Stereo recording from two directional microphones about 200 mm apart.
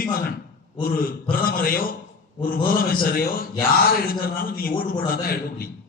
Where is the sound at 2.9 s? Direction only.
45° left (ahead or behind).